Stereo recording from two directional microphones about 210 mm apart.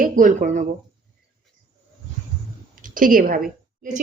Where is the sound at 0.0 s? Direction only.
40° right (ahead or behind).